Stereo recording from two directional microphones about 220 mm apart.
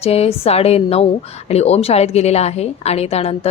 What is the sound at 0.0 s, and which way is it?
Speech, 30° left (ahead or behind).